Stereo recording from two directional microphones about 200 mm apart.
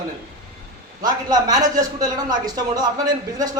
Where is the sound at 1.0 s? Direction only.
20° right (ahead or behind).